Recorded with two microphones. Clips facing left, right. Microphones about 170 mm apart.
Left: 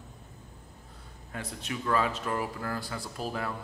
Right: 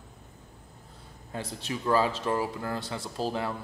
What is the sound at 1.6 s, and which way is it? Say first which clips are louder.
Speech: right 3 dB; 30° right (ahead or behind).